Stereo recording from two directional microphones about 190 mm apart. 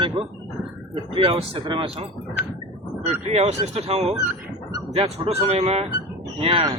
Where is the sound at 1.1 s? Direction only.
30° right (ahead or behind).